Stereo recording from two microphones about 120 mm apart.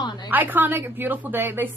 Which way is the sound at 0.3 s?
15° right (ahead or behind).